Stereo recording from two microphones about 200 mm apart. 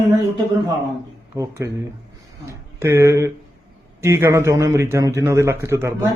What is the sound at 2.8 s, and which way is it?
A man's voice, 15° right (ahead or behind).